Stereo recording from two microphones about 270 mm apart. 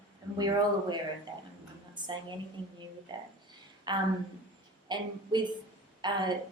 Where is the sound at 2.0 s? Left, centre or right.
Centre.